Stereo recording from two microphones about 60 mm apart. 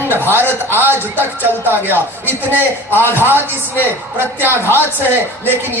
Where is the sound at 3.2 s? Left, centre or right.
Right.